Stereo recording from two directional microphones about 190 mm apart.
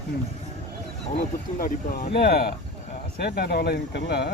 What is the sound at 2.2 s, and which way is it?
Speech, 55° left (ahead or behind).